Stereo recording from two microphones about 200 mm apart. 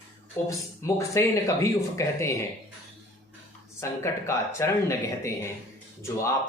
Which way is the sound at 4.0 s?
15° left (ahead or behind).